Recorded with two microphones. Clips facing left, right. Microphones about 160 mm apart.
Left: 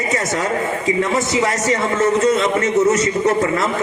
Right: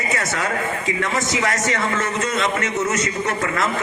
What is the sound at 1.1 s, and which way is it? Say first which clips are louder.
A man's voice: left 4 dB; 30° left (ahead or behind).